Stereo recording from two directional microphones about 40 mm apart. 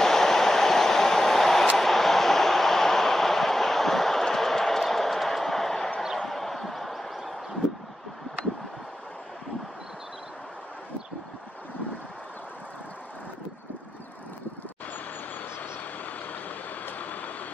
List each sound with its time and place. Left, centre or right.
0.0 s train: centre
1.8 s vehicle: centre
6.1 s a sound: centre
16.3 s vehicle: left